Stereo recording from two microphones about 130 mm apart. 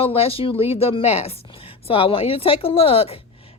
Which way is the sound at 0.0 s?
50° left (ahead or behind).